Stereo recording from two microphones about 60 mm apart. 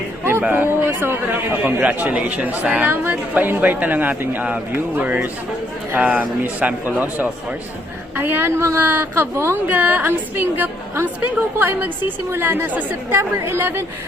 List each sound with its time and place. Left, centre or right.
0.5 s speech: right
1.6 s speech: right
8.8 s speech: right
9.6 s a woman's voice: right
12.6 s speech: right
13.1 s a woman's voice: right